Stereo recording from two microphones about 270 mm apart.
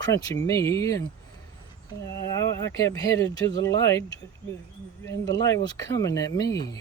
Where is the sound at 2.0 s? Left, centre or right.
Centre.